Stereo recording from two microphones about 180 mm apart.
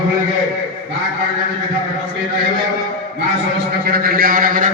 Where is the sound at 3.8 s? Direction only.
55° right (ahead or behind).